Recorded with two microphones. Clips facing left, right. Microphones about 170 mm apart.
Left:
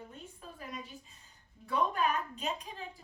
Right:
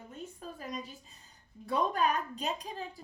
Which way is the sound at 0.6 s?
40° right (ahead or behind).